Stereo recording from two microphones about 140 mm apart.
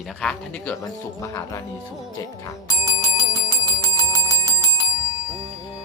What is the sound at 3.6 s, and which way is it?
Bell, 25° left (ahead or behind).